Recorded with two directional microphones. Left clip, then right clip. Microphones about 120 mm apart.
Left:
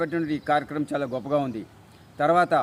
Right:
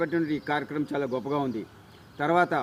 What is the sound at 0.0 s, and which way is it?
Speech, 45° left (ahead or behind).